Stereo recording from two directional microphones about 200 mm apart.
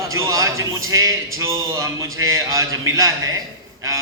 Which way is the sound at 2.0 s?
90° right.